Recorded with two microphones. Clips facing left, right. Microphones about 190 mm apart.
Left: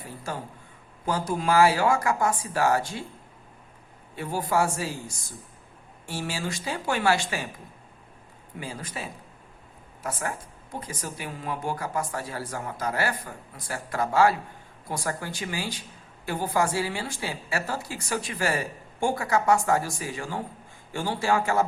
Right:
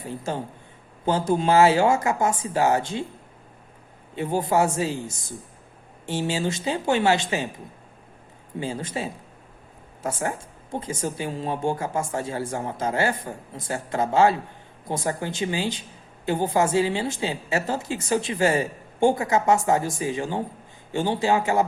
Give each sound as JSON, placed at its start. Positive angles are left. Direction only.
{"t": 0.2, "sound": "speech", "side_deg": -25}
{"t": 4.1, "sound": "speech", "side_deg": -20}
{"t": 8.5, "sound": "speech", "side_deg": -25}